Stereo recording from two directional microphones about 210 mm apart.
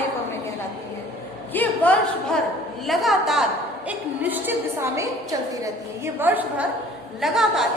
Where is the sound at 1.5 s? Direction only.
10° left (ahead or behind).